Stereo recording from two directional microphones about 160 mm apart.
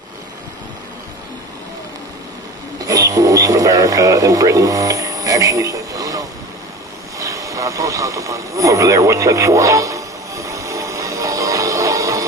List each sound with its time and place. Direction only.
2.8 s speech: 20° right (ahead or behind)
7.2 s vehicle: 20° right (ahead or behind)